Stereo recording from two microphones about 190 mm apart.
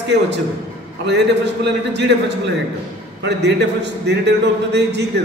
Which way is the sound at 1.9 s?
65° right (ahead or behind).